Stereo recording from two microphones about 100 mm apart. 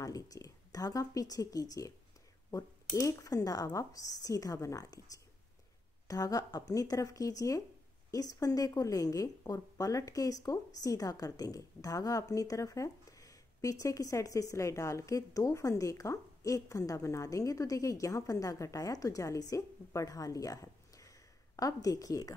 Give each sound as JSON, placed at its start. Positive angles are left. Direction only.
{"t": 0.0, "sound": "a woman's voice", "side_deg": 40}
{"t": 6.0, "sound": "a woman's voice", "side_deg": 35}